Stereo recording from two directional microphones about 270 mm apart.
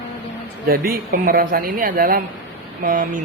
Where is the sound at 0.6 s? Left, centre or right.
Right.